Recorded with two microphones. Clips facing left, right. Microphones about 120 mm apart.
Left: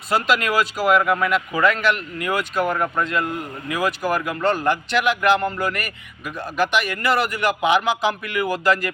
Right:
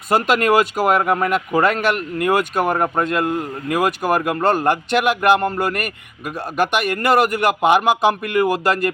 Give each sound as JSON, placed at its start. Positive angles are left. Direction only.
{"t": 0.1, "sound": "speech", "side_deg": -45}